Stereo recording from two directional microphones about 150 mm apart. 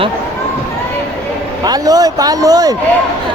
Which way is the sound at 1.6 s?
25° right (ahead or behind).